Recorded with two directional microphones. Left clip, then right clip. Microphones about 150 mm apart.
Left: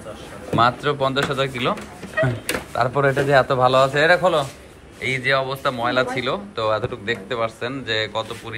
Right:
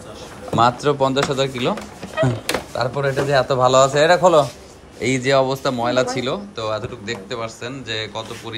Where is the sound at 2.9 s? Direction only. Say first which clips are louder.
Left 2 dB; 10° left (ahead or behind).